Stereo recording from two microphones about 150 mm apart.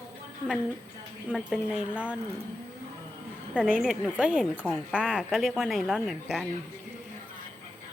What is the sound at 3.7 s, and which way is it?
Speech, 5° right (ahead or behind).